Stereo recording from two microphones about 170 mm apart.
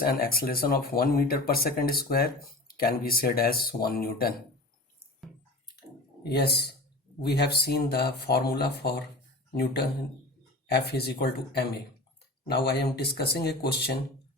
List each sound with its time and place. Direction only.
0.0 s speech: 60° left (ahead or behind)
6.2 s speech: 70° left (ahead or behind)
10.7 s speech: 70° left (ahead or behind)